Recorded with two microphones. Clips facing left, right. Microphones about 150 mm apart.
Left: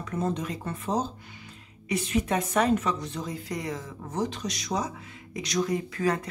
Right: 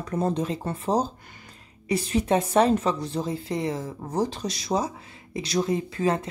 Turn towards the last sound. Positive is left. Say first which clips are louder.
# right 2 dB
turn(degrees=-25)  # may be behind; listen again after turning